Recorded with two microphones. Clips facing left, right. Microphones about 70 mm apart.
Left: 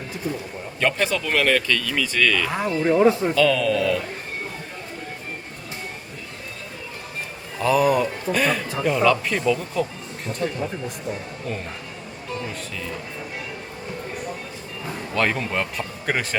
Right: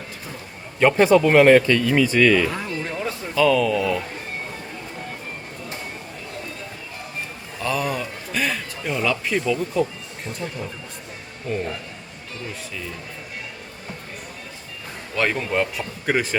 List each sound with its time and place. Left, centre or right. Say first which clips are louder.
0.8 s speech: right 8 dB; centre
2.6 s speech: left 9 dB; left
3.3 s speech: right 1 dB; centre
7.6 s speech: left 6 dB; centre
11.5 s speech: right 5 dB; centre
15.1 s speech: right 1 dB; centre